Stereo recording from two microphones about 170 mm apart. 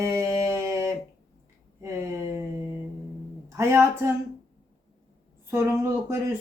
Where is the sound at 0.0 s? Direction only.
20° right (ahead or behind).